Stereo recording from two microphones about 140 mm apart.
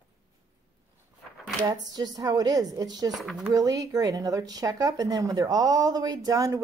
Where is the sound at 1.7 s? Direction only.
25° right (ahead or behind).